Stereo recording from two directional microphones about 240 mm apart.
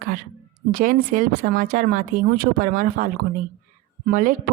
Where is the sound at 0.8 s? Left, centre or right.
Right.